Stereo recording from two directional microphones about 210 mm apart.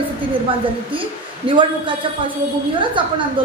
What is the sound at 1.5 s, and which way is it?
Speech, 25° right (ahead or behind).